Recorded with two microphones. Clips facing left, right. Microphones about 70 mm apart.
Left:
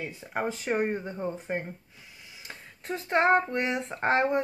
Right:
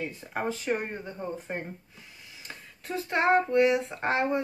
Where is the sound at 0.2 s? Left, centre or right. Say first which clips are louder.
Left 3 dB; centre.